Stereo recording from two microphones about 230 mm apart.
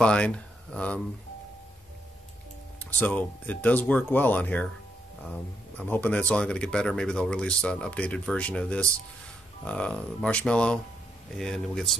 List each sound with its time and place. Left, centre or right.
0.0 s speech: centre
3.0 s speech: centre
5.8 s speech: centre